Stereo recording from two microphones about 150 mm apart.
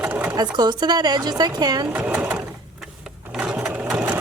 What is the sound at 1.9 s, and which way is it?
Sewing machine, 10° right (ahead or behind).